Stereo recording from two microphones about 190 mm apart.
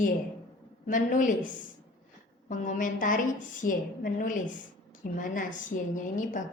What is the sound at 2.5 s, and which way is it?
A woman's voice, 45° left (ahead or behind).